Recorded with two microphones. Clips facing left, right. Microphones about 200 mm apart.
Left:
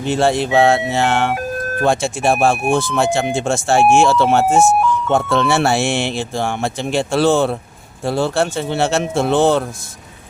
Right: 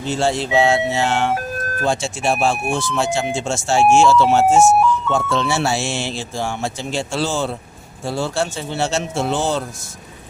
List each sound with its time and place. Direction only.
0.0 s speech: 60° left (ahead or behind)